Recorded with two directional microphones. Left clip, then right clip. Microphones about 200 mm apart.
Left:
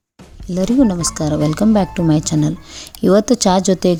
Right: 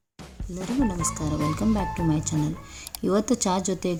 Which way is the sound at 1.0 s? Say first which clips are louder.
Left 9 dB; 25° left (ahead or behind).